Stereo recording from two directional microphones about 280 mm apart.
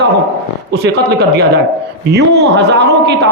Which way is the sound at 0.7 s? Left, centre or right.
Right.